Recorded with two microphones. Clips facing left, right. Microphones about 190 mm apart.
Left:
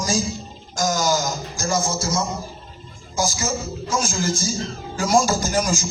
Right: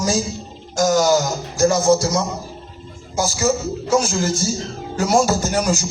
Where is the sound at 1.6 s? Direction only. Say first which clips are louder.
Right 9 dB; 65° right (ahead or behind).